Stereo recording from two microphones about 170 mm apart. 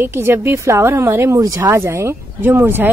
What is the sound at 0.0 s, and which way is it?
A woman's voice, 15° right (ahead or behind).